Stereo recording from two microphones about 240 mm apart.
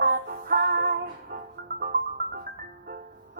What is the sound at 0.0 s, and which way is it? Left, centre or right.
Music, right.